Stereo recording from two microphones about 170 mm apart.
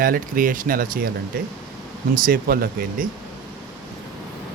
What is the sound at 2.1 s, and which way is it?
Speech, 55° right (ahead or behind).